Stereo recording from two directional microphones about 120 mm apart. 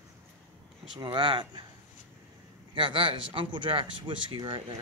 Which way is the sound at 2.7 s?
45° right (ahead or behind).